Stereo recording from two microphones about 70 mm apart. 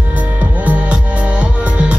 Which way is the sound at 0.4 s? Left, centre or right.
Right.